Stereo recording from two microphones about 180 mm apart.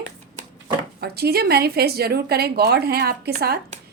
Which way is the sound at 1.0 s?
60° right (ahead or behind).